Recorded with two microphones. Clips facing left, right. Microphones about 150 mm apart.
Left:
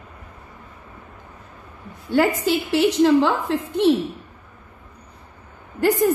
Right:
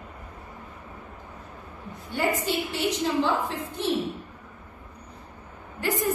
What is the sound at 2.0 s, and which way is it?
A woman's voice, 90° left.